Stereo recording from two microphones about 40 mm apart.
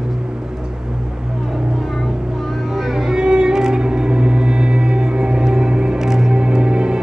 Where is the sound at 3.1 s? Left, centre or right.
Centre.